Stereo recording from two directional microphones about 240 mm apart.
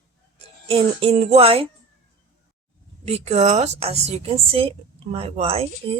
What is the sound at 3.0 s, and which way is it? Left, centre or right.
A woman's voice, right.